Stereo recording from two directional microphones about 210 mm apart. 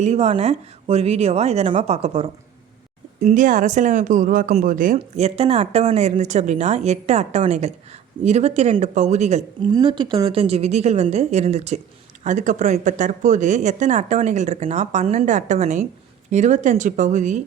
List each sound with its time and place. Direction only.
0.0 s speech: 30° right (ahead or behind)
3.2 s speech: 40° right (ahead or behind)